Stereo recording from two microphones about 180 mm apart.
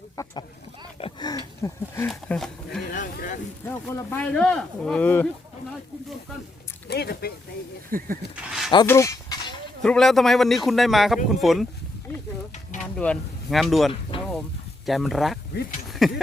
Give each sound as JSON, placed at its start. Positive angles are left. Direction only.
{"t": 0.2, "sound": "speech", "side_deg": 15}
{"t": 0.9, "sound": "a sound", "side_deg": 30}
{"t": 1.3, "sound": "a sound", "side_deg": 20}
{"t": 2.0, "sound": "a man's voice", "side_deg": 5}
{"t": 2.9, "sound": "speech", "side_deg": 45}
{"t": 3.7, "sound": "speech", "side_deg": 10}
{"t": 6.8, "sound": "speech", "side_deg": 65}
{"t": 7.9, "sound": "speech", "side_deg": -50}
{"t": 8.4, "sound": "speech", "side_deg": 0}
{"t": 8.9, "sound": "a sound", "side_deg": 15}
{"t": 9.8, "sound": "a man's voice", "side_deg": 5}
{"t": 13.0, "sound": "a man's voice", "side_deg": 5}